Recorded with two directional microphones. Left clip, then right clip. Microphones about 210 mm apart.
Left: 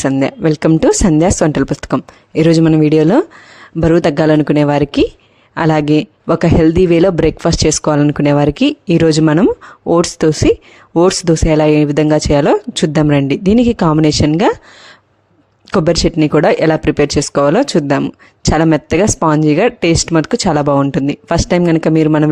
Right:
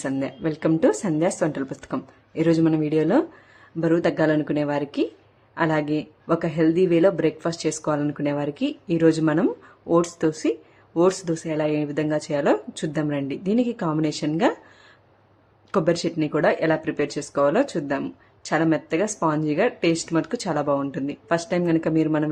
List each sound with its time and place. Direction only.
0.0 s speech: 45° left (ahead or behind)
15.7 s speech: 45° left (ahead or behind)